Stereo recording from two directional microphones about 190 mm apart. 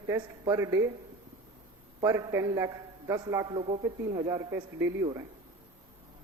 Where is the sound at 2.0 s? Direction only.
20° right (ahead or behind).